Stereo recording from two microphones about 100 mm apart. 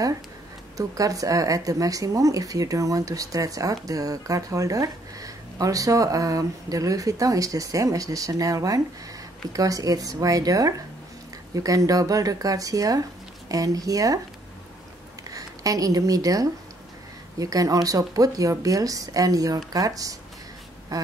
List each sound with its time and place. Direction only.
0.7 s speech: 35° right (ahead or behind)
15.2 s speech: 35° right (ahead or behind)